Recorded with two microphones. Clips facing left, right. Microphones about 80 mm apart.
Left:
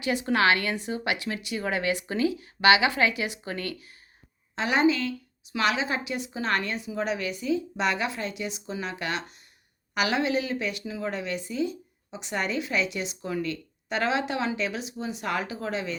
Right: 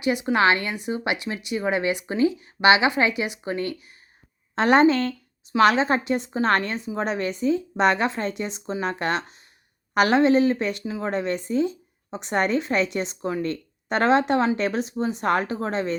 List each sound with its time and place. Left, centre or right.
0.0 s speech: centre
4.5 s a woman's voice: right